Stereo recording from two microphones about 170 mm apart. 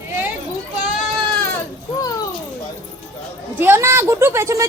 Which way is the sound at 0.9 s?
5° left (ahead or behind).